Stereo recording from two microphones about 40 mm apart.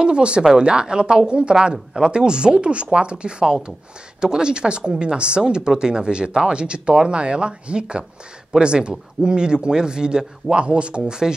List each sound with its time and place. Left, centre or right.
0.0 s speech: right